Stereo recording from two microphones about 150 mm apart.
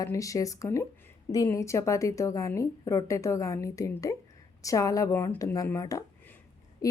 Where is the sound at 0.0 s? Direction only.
20° left (ahead or behind).